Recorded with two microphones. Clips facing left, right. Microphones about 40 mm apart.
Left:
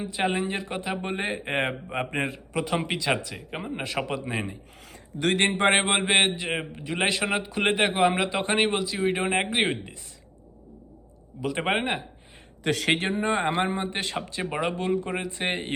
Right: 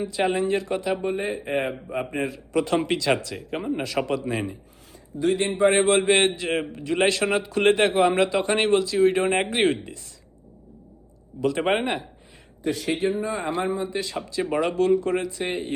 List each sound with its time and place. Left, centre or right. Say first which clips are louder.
0.2 s a man's voice: right 4 dB; centre
1.0 s speech: right 3 dB; left
2.6 s a man's voice: right 5 dB; centre
4.9 s speech: right 2 dB; left
5.7 s a man's voice: right 3 dB; left
11.6 s a man's voice: even; centre
12.6 s speech: even; left
14.5 s a man's voice: right 6 dB; centre
15.3 s speech: right 1 dB; left